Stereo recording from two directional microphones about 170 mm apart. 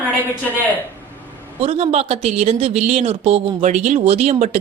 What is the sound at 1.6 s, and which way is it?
Speech, 35° right (ahead or behind).